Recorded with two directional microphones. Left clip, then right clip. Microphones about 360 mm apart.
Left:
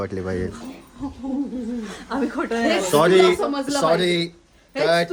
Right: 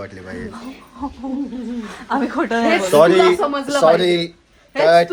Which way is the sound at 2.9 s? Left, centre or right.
Centre.